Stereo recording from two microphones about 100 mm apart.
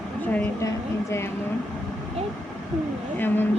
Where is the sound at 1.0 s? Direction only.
25° left (ahead or behind).